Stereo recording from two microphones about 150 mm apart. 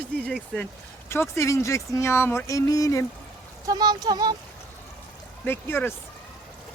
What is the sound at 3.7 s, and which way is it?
Speech, 25° right (ahead or behind).